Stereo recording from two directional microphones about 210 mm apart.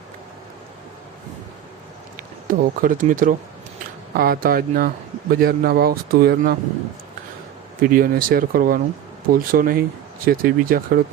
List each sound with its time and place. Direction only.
2.5 s speech: 40° right (ahead or behind)
7.8 s speech: 45° right (ahead or behind)